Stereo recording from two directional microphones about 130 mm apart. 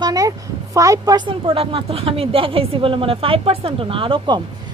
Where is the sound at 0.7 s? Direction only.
25° right (ahead or behind).